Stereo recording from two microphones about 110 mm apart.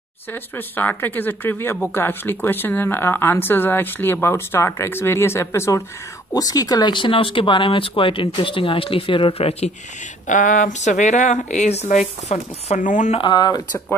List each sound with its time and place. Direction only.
0.3 s speech: 15° left (ahead or behind); by 9.7 s 65° left (ahead or behind)
10.7 s speech: 90° left
13.2 s speech: 40° left (ahead or behind)